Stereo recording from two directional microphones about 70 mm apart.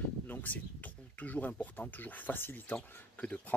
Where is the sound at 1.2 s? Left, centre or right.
Left.